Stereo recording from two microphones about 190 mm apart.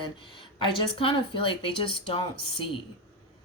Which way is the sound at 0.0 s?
25° left (ahead or behind).